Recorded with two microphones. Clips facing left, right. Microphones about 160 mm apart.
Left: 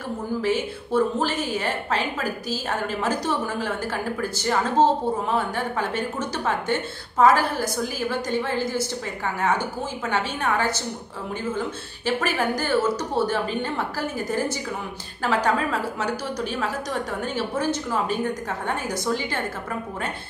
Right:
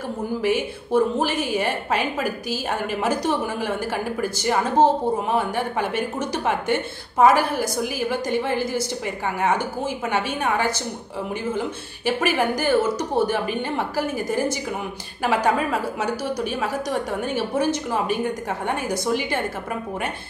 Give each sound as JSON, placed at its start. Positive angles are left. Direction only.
{"t": 0.4, "sound": "speech", "side_deg": -15}